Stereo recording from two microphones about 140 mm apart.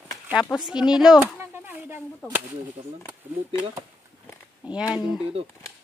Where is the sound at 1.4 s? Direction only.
15° right (ahead or behind).